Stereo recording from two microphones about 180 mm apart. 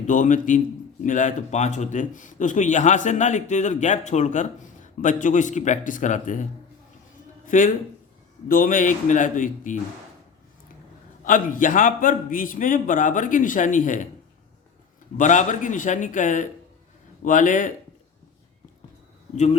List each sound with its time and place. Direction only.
0.1 s speech: 45° left (ahead or behind)
11.2 s speech: 50° left (ahead or behind)
15.2 s speech: 45° left (ahead or behind)